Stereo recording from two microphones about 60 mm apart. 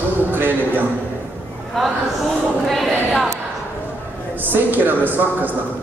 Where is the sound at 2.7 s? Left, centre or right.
Centre.